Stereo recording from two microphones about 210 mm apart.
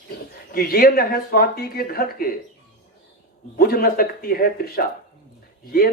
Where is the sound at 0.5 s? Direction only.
45° left (ahead or behind).